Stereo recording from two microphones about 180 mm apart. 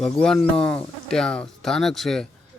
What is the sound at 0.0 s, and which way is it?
A man's voice, 5° left (ahead or behind).